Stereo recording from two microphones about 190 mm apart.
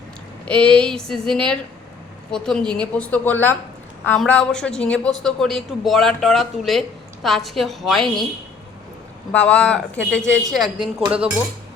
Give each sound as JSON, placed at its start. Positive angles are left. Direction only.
{"t": 0.4, "sound": "a woman's voice", "side_deg": 5}
{"t": 9.3, "sound": "a woman's voice", "side_deg": 5}
{"t": 10.6, "sound": "a woman's voice", "side_deg": -25}
{"t": 11.1, "sound": "speech", "side_deg": -5}